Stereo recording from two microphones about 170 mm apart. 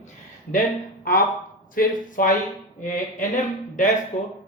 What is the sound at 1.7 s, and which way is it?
Speech, 50° left (ahead or behind).